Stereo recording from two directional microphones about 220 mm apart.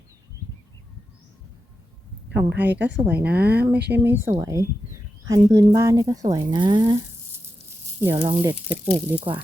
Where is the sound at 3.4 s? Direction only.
45° right (ahead or behind).